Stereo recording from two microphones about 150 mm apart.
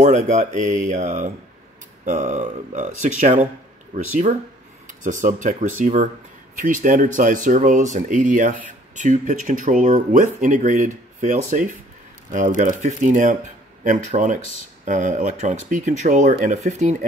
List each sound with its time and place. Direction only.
0.0 s speech: 50° right (ahead or behind)